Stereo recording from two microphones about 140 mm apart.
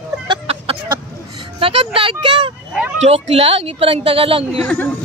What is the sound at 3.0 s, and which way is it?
Speech, 45° right (ahead or behind).